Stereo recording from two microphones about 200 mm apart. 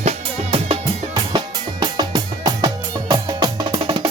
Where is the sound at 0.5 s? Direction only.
25° right (ahead or behind).